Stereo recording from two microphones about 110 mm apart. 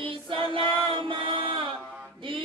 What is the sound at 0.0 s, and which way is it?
Choir, 50° right (ahead or behind).